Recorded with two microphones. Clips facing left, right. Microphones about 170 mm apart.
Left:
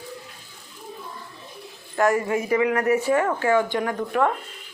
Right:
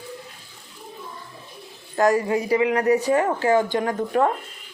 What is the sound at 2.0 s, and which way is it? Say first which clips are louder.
Speech: right 2 dB; 40° right (ahead or behind).